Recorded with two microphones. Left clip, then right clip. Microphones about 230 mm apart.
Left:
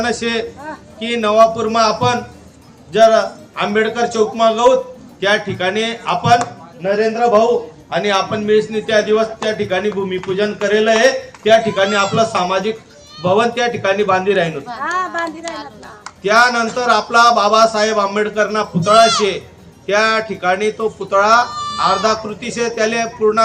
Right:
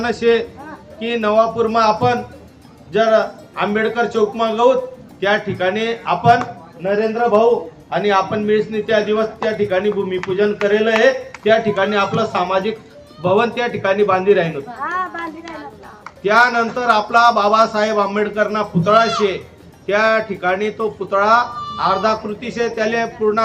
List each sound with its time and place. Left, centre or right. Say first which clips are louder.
0.0 s a man's voice: right 3 dB; centre
14.8 s a sound: left 4 dB; left
16.2 s a man's voice: left 1 dB; centre
19.9 s a man's voice: left 1 dB; centre